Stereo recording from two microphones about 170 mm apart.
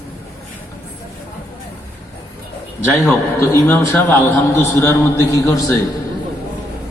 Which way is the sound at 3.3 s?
15° left (ahead or behind).